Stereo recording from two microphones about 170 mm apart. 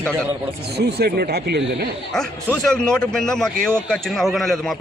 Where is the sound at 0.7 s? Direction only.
70° right (ahead or behind).